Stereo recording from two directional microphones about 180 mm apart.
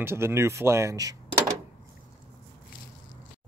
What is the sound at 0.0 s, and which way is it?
Speech, 15° right (ahead or behind).